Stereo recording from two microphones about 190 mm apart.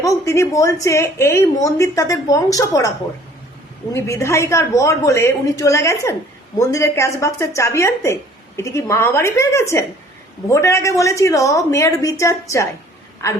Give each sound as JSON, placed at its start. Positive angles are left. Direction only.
{"t": 0.0, "sound": "a woman's voice", "side_deg": 15}
{"t": 3.9, "sound": "speech", "side_deg": 15}